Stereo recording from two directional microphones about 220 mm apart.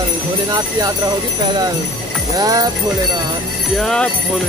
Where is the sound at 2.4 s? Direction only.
15° right (ahead or behind).